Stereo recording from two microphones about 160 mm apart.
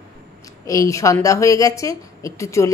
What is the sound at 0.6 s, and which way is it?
A woman's voice, 20° left (ahead or behind).